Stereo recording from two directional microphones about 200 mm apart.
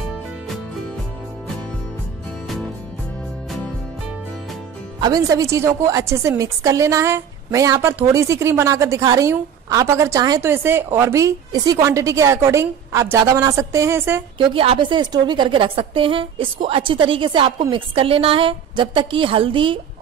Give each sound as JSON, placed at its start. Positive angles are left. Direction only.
{"t": 2.4, "sound": "music", "side_deg": 0}
{"t": 5.0, "sound": "a woman's voice", "side_deg": -20}
{"t": 14.4, "sound": "a woman's voice", "side_deg": -25}